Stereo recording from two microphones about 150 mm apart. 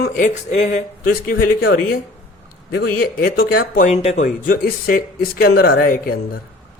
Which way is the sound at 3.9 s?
45° left (ahead or behind).